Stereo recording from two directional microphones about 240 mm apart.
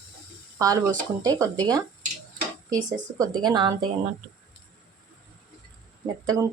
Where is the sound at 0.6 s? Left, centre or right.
Centre.